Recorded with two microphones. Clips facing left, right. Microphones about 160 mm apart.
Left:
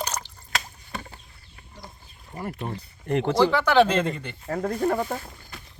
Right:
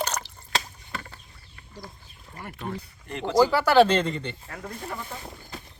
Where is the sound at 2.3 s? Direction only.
25° left (ahead or behind).